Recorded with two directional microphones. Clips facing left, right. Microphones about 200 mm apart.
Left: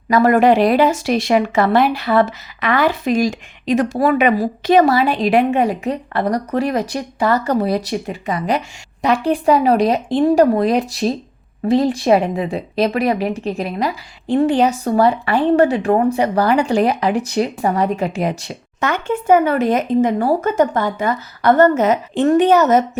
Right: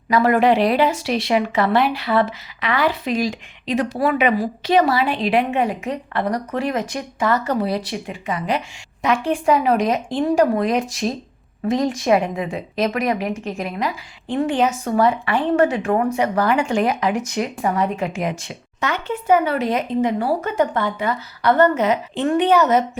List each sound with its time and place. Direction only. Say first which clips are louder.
0.1 s a woman's voice: left 3 dB; 45° left (ahead or behind)